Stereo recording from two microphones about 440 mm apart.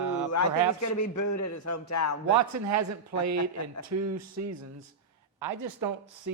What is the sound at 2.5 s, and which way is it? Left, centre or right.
Speech, right.